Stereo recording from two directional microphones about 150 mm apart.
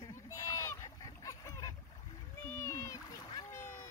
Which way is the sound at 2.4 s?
20° left (ahead or behind).